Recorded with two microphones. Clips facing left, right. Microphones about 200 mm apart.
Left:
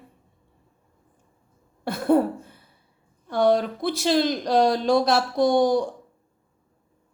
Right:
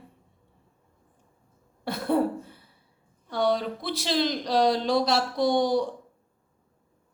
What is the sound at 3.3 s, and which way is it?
A woman's voice, 50° left (ahead or behind).